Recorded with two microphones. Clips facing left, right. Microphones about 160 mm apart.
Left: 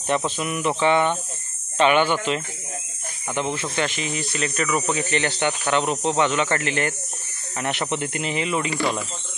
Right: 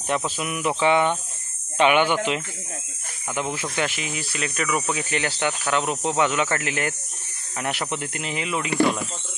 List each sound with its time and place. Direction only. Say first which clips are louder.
0.4 s speech: left 1 dB; 5° right (ahead or behind)
3.6 s speech: left 1 dB; 5° right (ahead or behind)
8.6 s speech: right 4 dB; 55° right (ahead or behind)